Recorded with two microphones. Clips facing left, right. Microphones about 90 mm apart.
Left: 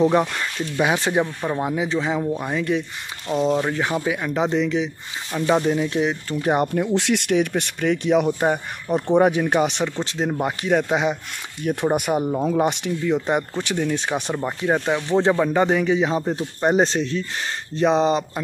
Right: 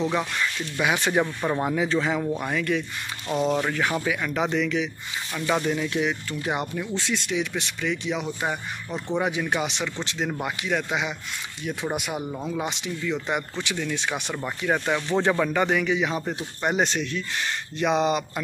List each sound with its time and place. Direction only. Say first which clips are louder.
0.1 s speech: left 6 dB; 35° left (ahead or behind)
1.2 s speech: left 1 dB; centre (ahead or behind)
1.8 s speech: left 1 dB; 20° left (ahead or behind); by 6.7 s 40° left (ahead or behind)
6.9 s a man's voice: left 8 dB; 75° left (ahead or behind); by 11.1 s 40° left (ahead or behind)
11.6 s a man's voice: left 8 dB; 50° left (ahead or behind); by 14.4 s 35° left (ahead or behind)
14.4 s a man's voice: left 2 dB; 25° left (ahead or behind)